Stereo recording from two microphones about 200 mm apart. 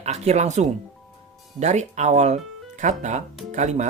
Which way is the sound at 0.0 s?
35° right (ahead or behind).